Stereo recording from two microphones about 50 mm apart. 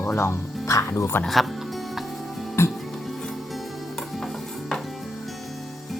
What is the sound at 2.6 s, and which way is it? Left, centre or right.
Music, left.